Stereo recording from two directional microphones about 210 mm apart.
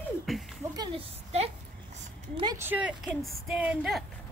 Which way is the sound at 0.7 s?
20° right (ahead or behind).